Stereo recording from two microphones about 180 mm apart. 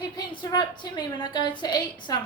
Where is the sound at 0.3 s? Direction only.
25° left (ahead or behind).